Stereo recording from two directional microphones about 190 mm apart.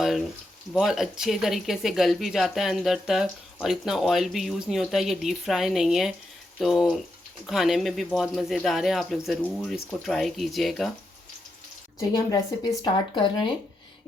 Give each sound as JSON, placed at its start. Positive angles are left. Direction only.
{"t": 0.0, "sound": "speech", "side_deg": 0}
{"t": 11.9, "sound": "speech", "side_deg": 20}